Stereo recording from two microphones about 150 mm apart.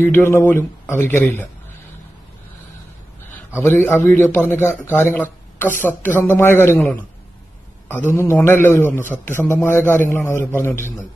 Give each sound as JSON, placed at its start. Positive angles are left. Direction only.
{"t": 0.0, "sound": "speech", "side_deg": 15}
{"t": 3.5, "sound": "speech", "side_deg": 15}